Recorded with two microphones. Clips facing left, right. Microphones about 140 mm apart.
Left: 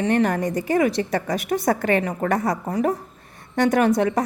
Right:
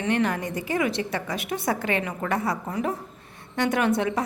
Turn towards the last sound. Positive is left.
turn(degrees=40)  # may be behind; listen again after turning